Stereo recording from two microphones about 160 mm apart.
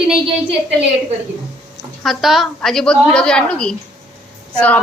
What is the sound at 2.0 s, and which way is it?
A woman's voice, centre (ahead or behind).